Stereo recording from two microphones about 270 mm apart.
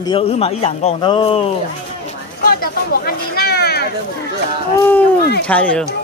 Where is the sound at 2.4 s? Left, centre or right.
Left.